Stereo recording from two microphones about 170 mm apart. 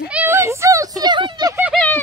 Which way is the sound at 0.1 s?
10° right (ahead or behind).